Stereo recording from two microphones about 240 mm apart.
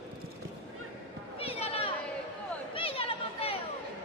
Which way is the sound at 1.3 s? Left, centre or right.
Left.